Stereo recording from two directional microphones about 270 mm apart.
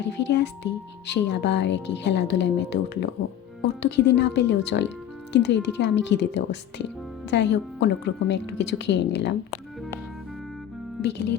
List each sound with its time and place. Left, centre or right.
0.0 s speech: left
11.0 s speech: left